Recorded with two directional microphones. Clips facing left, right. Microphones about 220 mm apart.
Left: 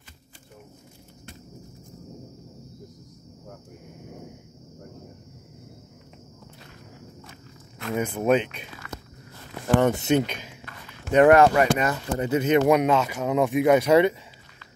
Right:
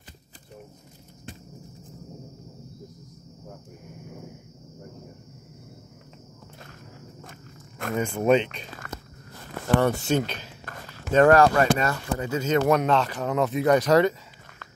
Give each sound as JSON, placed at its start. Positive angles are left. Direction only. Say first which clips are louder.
{"t": 7.9, "sound": "speech", "louder": "right 1 dB", "side_deg": 5}
{"t": 9.8, "sound": "speech", "louder": "left 2 dB", "side_deg": 20}
{"t": 10.6, "sound": "a sound", "louder": "right 3 dB", "side_deg": -45}
{"t": 11.1, "sound": "speech", "louder": "left 1 dB", "side_deg": 20}